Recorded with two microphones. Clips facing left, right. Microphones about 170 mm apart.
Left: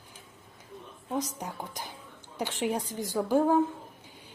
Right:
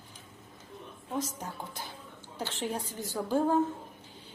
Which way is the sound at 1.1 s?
15° left (ahead or behind).